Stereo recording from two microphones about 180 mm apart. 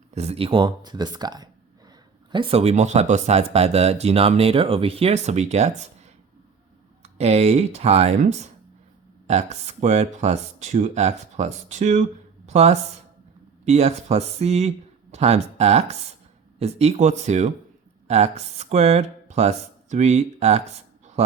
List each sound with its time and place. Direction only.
0.1 s speech: 35° right (ahead or behind)
7.0 s speech: 35° right (ahead or behind)